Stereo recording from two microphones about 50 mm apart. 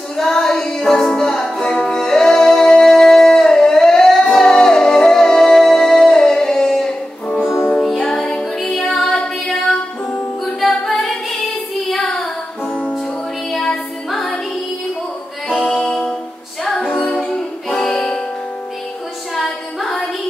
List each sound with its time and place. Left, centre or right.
0.2 s music: centre
10.6 s music: centre
15.5 s music: right
16.6 s music: centre
16.9 s music: left
19.3 s a sound: centre